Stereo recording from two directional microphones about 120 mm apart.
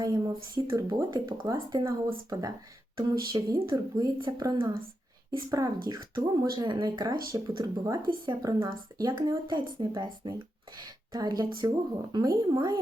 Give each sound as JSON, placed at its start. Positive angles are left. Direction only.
{"t": 0.0, "sound": "speech", "side_deg": -35}
{"t": 1.9, "sound": "speech", "side_deg": -30}
{"t": 3.0, "sound": "speech", "side_deg": -40}